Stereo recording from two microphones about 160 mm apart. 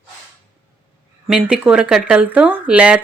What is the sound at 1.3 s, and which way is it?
Speech, 5° right (ahead or behind).